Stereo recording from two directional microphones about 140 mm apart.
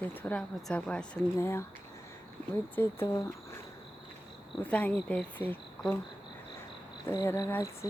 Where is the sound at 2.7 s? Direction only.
20° left (ahead or behind).